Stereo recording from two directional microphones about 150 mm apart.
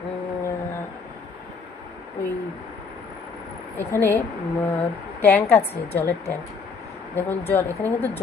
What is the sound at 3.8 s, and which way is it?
Speech, 15° left (ahead or behind).